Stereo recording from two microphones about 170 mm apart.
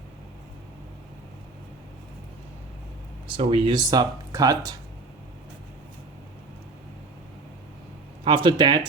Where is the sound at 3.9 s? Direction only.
20° right (ahead or behind).